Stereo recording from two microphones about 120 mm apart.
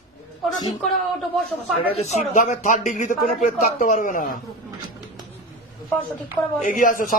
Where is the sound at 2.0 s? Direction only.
75° left (ahead or behind); by 4.3 s 90° left.